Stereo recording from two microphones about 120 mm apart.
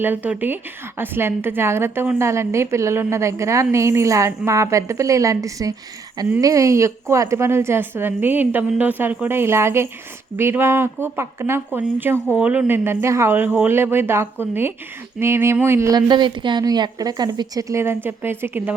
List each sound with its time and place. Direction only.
0.0 s a woman's voice: 15° right (ahead or behind)
16.0 s a woman's voice: 40° right (ahead or behind); by 18.7 s 20° right (ahead or behind)